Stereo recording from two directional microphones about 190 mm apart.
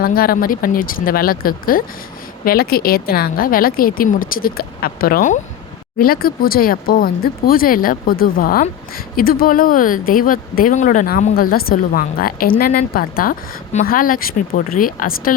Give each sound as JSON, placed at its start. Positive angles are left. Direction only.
{"t": 0.0, "sound": "speech", "side_deg": 50}